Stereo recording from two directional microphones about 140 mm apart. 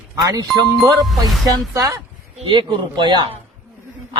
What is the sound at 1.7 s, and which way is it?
Speech, 25° right (ahead or behind).